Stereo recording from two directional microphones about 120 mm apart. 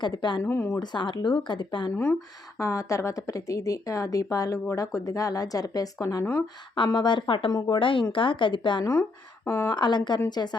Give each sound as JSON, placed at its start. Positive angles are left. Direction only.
{"t": 0.0, "sound": "speech", "side_deg": 40}
{"t": 0.4, "sound": "speech", "side_deg": 20}
{"t": 0.8, "sound": "speech", "side_deg": 40}
{"t": 2.6, "sound": "a woman's voice", "side_deg": 25}
{"t": 8.8, "sound": "speech", "side_deg": 25}
{"t": 9.7, "sound": "speech", "side_deg": 40}